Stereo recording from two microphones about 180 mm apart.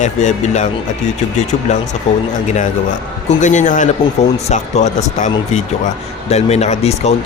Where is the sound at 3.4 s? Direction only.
40° left (ahead or behind).